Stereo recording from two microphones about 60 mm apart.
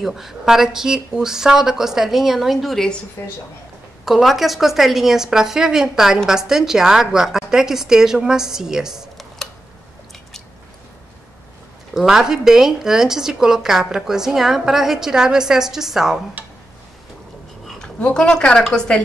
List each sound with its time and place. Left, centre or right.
0.0 s speech: centre
3.2 s a woman's voice: left
4.0 s speech: centre
9.4 s a sound: centre
11.9 s speech: centre
16.4 s a sound: right
17.6 s a woman's voice: centre